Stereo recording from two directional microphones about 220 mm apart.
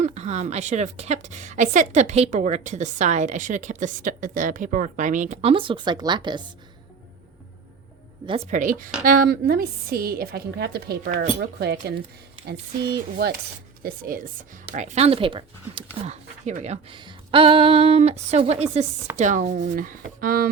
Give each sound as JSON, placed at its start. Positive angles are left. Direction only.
{"t": 0.0, "sound": "a woman's voice", "side_deg": -30}
{"t": 8.3, "sound": "a woman's voice", "side_deg": -35}
{"t": 13.8, "sound": "a woman's voice", "side_deg": -40}